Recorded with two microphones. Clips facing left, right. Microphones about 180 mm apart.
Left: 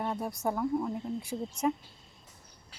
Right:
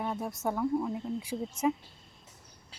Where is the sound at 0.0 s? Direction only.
Centre (ahead or behind).